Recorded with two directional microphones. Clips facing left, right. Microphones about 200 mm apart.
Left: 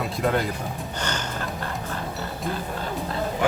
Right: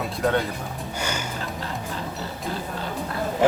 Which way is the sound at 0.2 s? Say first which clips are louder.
Right 1 dB; 5° left (ahead or behind).